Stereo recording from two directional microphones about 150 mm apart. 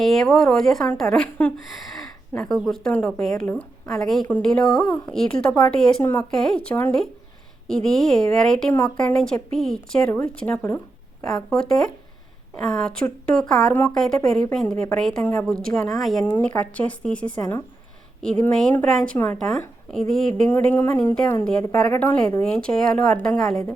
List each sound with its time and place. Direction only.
0.0 s a woman's voice: centre (ahead or behind)
6.0 s speech: 15° left (ahead or behind)
6.3 s a woman's voice: 5° left (ahead or behind)
15.7 s a woman's voice: centre (ahead or behind)
20.5 s a woman's voice: 15° left (ahead or behind)